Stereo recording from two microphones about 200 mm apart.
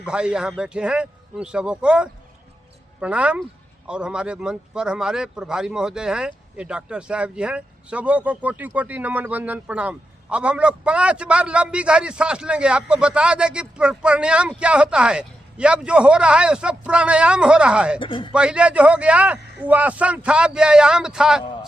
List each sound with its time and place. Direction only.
0.0 s speech: 5° right (ahead or behind)
18.0 s speech: 25° left (ahead or behind)
18.3 s speech: 5° right (ahead or behind)